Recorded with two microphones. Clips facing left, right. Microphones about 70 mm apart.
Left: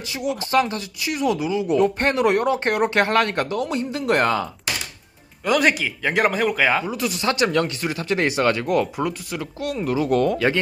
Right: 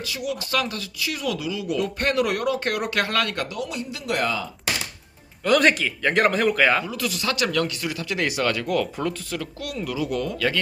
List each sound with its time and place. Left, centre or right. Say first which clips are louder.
0.0 s speech: left 3 dB; left
5.5 s speech: even; centre
6.8 s speech: left 4 dB; left
9.0 s speech: left 2 dB; centre; by 10.3 s left
10.3 s speech: left 4 dB; left